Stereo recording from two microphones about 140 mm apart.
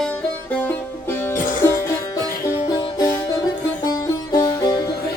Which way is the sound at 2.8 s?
30° left (ahead or behind).